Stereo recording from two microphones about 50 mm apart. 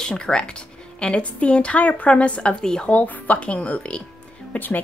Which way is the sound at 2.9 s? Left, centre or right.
Left.